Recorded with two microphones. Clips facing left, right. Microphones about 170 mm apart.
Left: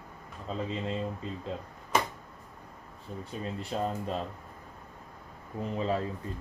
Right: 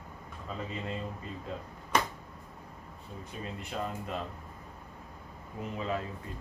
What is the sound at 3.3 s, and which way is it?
Speech, 35° left (ahead or behind).